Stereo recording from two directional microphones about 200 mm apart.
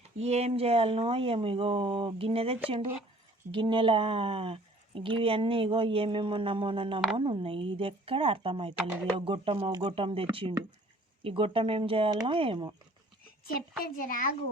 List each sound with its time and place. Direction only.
0.2 s speech: 30° right (ahead or behind)
13.2 s a child's voice: 45° left (ahead or behind)